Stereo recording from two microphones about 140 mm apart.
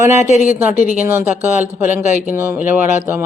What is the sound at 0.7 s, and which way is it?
Speech, 70° left (ahead or behind).